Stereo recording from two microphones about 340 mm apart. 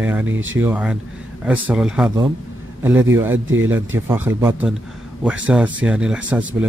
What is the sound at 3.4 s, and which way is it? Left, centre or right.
Speech, right.